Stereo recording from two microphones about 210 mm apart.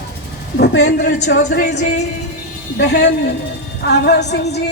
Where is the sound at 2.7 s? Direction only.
55° left (ahead or behind).